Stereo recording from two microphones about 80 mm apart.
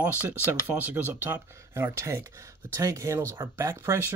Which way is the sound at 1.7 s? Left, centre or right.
Right.